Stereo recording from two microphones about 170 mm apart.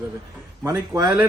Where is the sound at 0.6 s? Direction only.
15° right (ahead or behind).